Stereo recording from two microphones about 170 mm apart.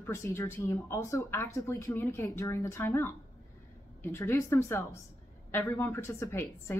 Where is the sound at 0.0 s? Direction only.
15° left (ahead or behind).